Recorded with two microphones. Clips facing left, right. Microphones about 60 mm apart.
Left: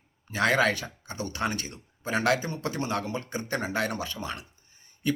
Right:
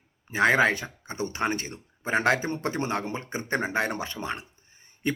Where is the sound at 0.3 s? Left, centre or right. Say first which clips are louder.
Right 3 dB; right.